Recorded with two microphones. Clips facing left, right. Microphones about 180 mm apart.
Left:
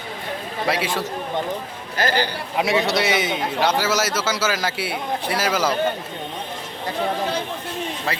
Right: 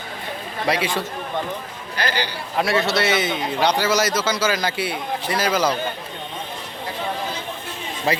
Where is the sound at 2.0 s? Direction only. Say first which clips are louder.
Left 3 dB; 45° left (ahead or behind).